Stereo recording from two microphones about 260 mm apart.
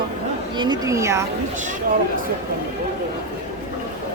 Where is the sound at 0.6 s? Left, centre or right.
Centre.